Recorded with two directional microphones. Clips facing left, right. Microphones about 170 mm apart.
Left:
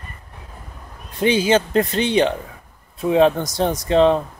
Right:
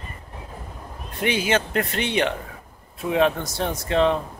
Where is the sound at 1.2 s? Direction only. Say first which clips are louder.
Left 6 dB; 30° left (ahead or behind).